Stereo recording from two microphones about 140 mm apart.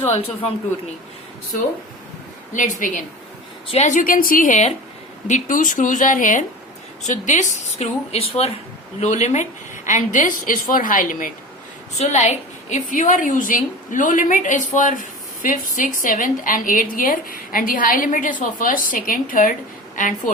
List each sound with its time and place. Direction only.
0.1 s a woman's voice: 45° left (ahead or behind)
2.5 s a woman's voice: 65° left (ahead or behind)
3.7 s a woman's voice: 55° left (ahead or behind); by 11.3 s 75° left (ahead or behind)
11.9 s a woman's voice: 50° left (ahead or behind); by 20.3 s 70° left (ahead or behind)